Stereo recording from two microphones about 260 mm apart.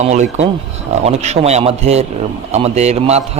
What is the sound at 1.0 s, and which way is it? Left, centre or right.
A man's voice, right.